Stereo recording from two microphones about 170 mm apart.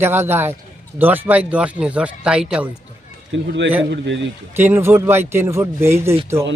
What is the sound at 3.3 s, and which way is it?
Speech, 90° right.